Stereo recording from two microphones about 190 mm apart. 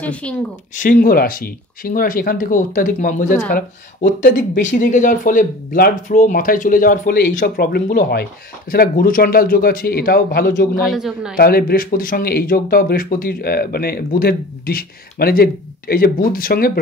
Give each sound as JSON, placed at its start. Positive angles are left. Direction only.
{"t": 0.0, "sound": "speech", "side_deg": 5}
{"t": 0.7, "sound": "speech", "side_deg": 45}
{"t": 10.9, "sound": "a man's voice", "side_deg": 0}
{"t": 11.3, "sound": "speech", "side_deg": 50}